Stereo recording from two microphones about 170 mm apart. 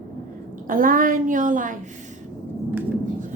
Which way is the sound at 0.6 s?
55° right (ahead or behind).